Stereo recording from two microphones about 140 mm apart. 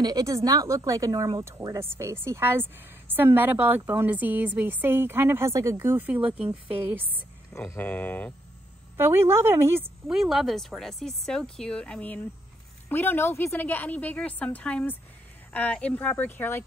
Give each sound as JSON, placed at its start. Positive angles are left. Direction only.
{"t": 0.0, "sound": "a woman's voice", "side_deg": -25}
{"t": 7.5, "sound": "a woman's voice", "side_deg": 15}
{"t": 8.9, "sound": "a woman's voice", "side_deg": -15}
{"t": 10.0, "sound": "a woman's voice", "side_deg": 0}